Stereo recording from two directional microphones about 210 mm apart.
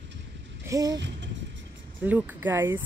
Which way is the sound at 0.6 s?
15° right (ahead or behind).